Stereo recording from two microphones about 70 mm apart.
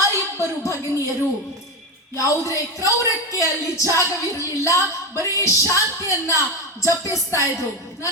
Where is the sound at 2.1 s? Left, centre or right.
Left.